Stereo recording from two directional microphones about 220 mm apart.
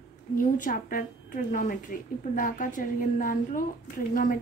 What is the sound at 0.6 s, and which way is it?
A woman's voice, 40° left (ahead or behind).